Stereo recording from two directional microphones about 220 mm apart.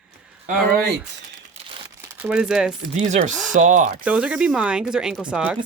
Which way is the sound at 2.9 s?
30° right (ahead or behind).